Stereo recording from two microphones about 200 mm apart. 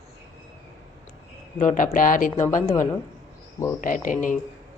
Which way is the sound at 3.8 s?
40° left (ahead or behind).